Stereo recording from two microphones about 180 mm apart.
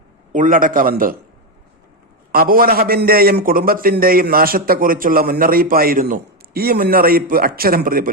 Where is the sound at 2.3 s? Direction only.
55° right (ahead or behind).